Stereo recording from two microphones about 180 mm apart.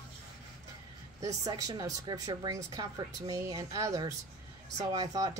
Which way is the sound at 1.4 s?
20° right (ahead or behind).